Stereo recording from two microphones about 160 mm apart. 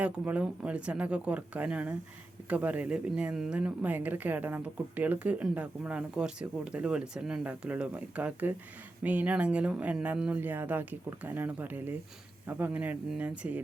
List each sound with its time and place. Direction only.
0.0 s speech: 10° right (ahead or behind)